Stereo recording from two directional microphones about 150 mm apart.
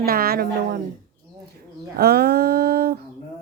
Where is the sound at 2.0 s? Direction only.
90° right.